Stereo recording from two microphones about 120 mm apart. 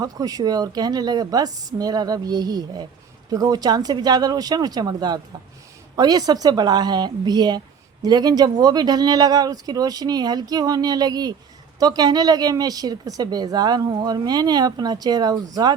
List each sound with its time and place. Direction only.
0.0 s a woman's voice: 30° right (ahead or behind)